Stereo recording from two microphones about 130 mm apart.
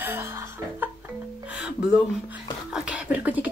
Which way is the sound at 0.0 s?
20° right (ahead or behind).